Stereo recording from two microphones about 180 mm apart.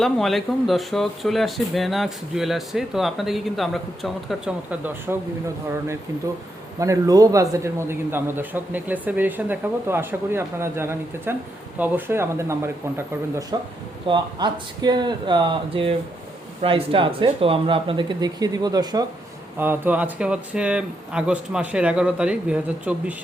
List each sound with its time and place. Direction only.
0.0 s speech: centre (ahead or behind)
6.7 s a man's voice: 15° right (ahead or behind)
19.5 s a man's voice: 10° right (ahead or behind)